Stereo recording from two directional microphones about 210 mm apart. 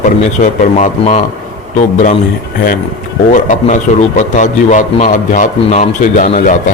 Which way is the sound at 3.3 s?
35° left (ahead or behind).